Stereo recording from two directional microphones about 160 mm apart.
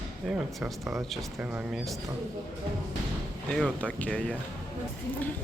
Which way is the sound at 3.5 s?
5° left (ahead or behind).